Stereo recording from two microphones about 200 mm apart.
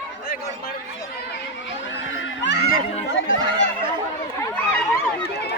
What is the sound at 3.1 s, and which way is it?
Speech, 70° left (ahead or behind).